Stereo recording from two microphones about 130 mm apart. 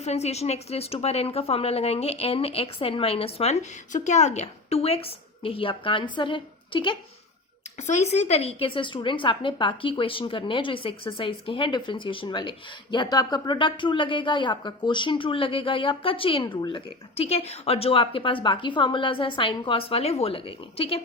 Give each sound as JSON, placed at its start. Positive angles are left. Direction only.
{"t": 0.0, "sound": "speech", "side_deg": 55}
{"t": 7.8, "sound": "a woman's voice", "side_deg": 60}